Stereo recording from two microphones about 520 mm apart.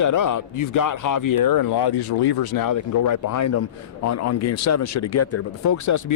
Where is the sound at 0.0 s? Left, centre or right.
Left.